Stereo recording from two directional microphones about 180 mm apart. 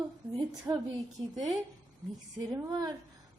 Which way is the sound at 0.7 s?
15° right (ahead or behind).